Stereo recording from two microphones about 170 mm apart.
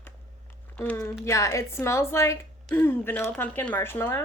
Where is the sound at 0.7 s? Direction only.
15° left (ahead or behind).